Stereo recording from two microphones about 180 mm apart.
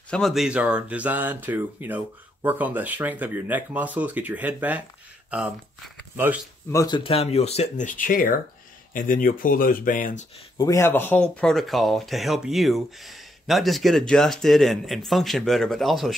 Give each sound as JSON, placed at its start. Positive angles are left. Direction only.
{"t": 0.1, "sound": "speech", "side_deg": 0}
{"t": 6.1, "sound": "speech", "side_deg": -10}
{"t": 6.7, "sound": "speech", "side_deg": 20}
{"t": 7.0, "sound": "speech", "side_deg": 35}
{"t": 10.6, "sound": "speech", "side_deg": 15}